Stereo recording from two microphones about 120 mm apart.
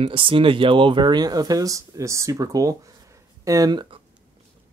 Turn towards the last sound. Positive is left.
turn(degrees=-30)  # may be behind; listen again after turning